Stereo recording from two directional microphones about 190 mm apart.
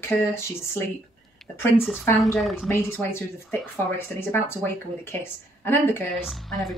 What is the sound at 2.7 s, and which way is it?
Speech, 10° left (ahead or behind).